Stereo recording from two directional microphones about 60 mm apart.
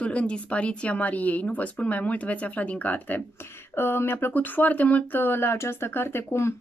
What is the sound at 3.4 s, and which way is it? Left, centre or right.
Speech, left.